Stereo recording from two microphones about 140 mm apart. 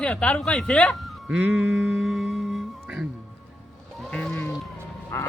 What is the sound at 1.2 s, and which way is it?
Music, 10° right (ahead or behind).